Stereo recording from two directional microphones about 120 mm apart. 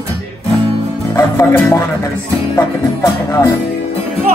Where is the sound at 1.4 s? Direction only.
20° left (ahead or behind).